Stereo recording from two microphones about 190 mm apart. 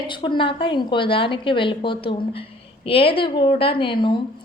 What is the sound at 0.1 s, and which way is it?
A woman's voice, 25° left (ahead or behind).